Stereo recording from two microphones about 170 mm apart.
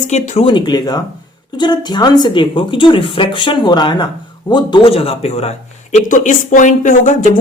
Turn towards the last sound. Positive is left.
turn(degrees=45)  # may be behind; listen again after turning